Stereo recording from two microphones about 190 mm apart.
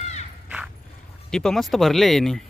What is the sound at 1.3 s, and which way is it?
A man's voice, 5° left (ahead or behind).